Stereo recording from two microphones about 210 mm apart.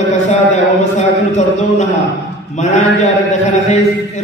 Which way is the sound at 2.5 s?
35° left (ahead or behind).